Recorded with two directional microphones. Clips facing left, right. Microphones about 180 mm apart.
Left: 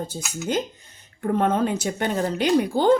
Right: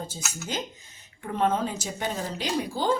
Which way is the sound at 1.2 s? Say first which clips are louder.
Left 5 dB; 55° left (ahead or behind).